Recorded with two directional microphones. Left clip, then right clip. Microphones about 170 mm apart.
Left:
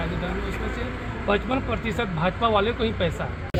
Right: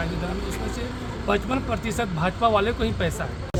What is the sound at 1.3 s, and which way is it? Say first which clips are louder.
Speech: even; 15° right (ahead or behind).